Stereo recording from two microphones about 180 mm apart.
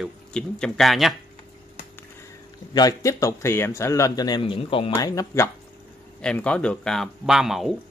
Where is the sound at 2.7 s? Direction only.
20° left (ahead or behind).